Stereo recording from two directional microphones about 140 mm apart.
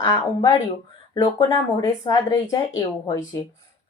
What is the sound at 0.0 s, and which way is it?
Speech, 25° left (ahead or behind).